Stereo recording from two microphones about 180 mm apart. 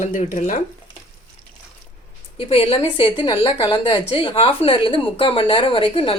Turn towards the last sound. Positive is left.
turn(degrees=30)  # may be behind; listen again after turning